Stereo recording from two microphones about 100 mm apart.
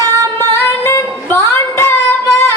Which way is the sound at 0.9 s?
25° left (ahead or behind).